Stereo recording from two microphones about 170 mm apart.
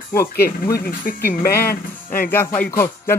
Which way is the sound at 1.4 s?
60° left (ahead or behind).